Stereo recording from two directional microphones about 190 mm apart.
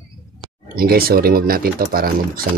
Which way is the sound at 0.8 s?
50° right (ahead or behind).